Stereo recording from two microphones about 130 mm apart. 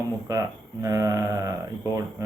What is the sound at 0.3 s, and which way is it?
Speech, 25° right (ahead or behind).